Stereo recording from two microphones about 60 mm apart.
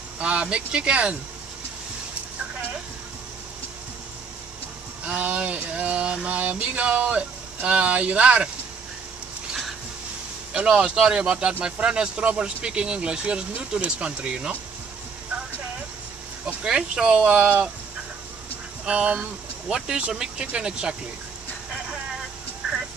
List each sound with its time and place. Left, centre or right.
0.2 s speech: centre
5.0 s speech: right
10.5 s speech: centre
16.6 s speech: centre
18.9 s speech: centre